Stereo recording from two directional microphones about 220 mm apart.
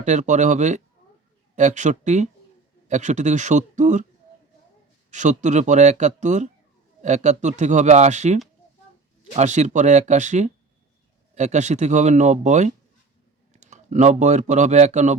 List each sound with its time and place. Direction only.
0.0 s speech: 35° right (ahead or behind)
5.1 s speech: 35° right (ahead or behind)